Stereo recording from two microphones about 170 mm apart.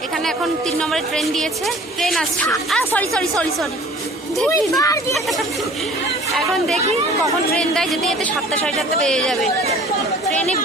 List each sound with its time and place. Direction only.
0.8 s a man's voice: 5° left (ahead or behind)
4.4 s speech: 20° left (ahead or behind)
6.3 s a man's voice: centre (ahead or behind)